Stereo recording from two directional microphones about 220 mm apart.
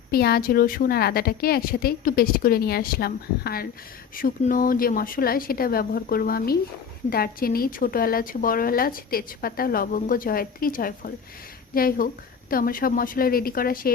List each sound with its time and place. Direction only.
0.1 s a woman's voice: 45° left (ahead or behind)